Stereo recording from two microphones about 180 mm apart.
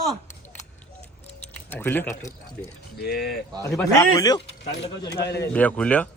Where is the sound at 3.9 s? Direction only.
20° left (ahead or behind).